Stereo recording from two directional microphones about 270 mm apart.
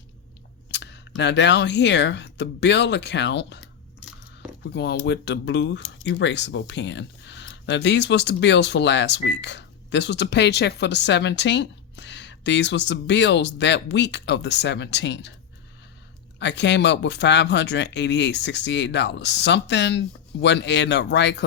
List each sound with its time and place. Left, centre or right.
0.7 s speech: left
4.6 s speech: left
16.4 s speech: left